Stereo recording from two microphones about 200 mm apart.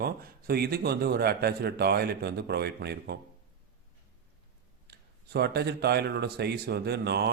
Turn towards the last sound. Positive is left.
turn(degrees=-55)  # may be behind; listen again after turning